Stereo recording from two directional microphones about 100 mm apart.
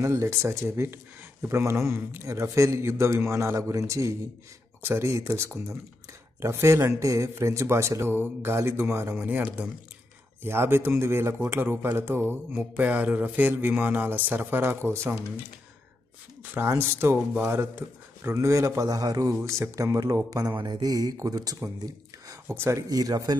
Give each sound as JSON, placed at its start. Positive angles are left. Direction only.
{"t": 0.0, "sound": "speech", "side_deg": -30}
{"t": 16.5, "sound": "speech", "side_deg": -25}
{"t": 22.5, "sound": "speech", "side_deg": -25}